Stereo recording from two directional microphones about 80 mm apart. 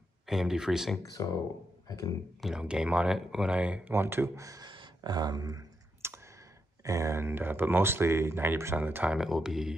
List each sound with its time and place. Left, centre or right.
0.3 s speech: centre
1.0 s speech: left
2.4 s speech: centre
3.9 s speech: right
4.4 s speech: right
4.6 s a sound: right
6.0 s clicking: right
6.8 s speech: right
9.1 s speech: centre